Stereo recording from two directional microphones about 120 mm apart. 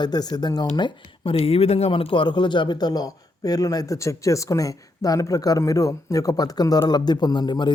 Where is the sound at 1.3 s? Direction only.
55° left (ahead or behind).